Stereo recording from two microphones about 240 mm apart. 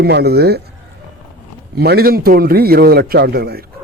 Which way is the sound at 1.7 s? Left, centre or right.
Right.